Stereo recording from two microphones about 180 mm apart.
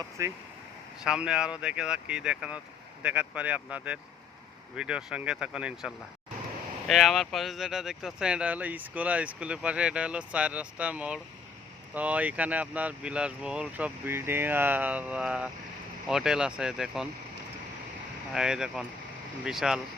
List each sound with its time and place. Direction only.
0.2 s speech: 15° right (ahead or behind)
1.0 s speech: 5° right (ahead or behind)
18.3 s speech: 5° right (ahead or behind)